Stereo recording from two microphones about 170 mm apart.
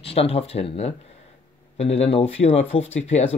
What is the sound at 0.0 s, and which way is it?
Speech, 35° left (ahead or behind).